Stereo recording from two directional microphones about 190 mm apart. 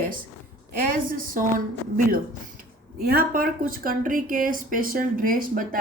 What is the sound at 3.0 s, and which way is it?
Speech, 50° right (ahead or behind).